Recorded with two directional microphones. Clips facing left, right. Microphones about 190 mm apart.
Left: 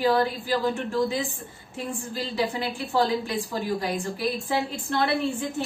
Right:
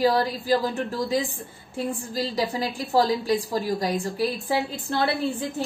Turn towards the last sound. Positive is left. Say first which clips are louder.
# even
turn(degrees=-35)  # may be behind; listen again after turning